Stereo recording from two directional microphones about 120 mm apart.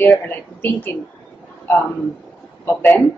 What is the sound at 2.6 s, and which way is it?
Speech, 15° left (ahead or behind).